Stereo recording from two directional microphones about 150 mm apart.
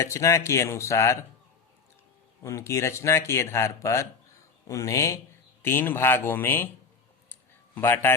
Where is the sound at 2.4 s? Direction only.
20° left (ahead or behind).